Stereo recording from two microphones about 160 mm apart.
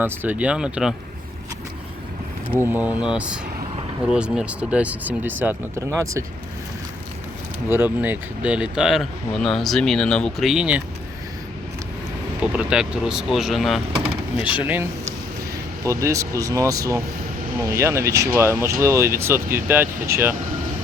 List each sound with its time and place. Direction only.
0.0 s speech: 10° right (ahead or behind)
2.6 s speech: 10° right (ahead or behind)
7.7 s speech: 10° right (ahead or behind)
12.4 s speech: 5° right (ahead or behind)
14.5 s speech: 10° right (ahead or behind)